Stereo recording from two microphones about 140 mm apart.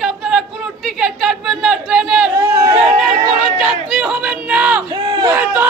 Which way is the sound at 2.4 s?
25° right (ahead or behind).